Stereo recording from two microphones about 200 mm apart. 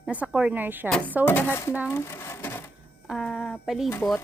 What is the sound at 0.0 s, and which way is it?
Speech, 5° right (ahead or behind).